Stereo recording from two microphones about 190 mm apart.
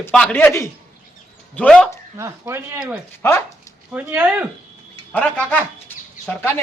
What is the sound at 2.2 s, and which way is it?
Speech, 15° right (ahead or behind).